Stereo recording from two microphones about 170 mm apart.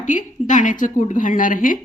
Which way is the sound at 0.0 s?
50° left (ahead or behind).